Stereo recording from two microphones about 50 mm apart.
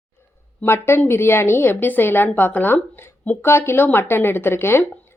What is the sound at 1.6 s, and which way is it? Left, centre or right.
A woman's voice, left.